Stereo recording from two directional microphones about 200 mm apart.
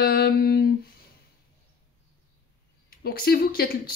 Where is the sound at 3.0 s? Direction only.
50° left (ahead or behind).